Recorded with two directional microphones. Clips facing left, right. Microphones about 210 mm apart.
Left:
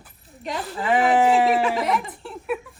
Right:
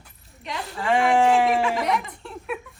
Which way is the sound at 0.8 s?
5° left (ahead or behind).